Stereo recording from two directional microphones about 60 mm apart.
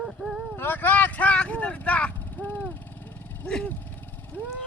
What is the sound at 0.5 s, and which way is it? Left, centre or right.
Speech, left.